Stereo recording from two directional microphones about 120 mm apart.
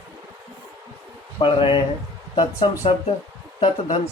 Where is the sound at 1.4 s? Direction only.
50° left (ahead or behind).